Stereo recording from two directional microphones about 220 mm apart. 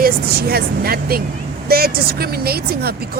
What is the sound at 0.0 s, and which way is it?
Speech, 45° right (ahead or behind).